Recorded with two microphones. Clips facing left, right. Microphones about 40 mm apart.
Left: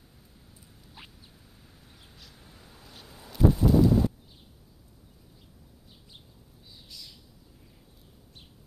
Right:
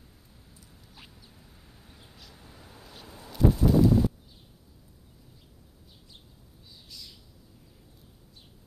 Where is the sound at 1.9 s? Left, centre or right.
Centre.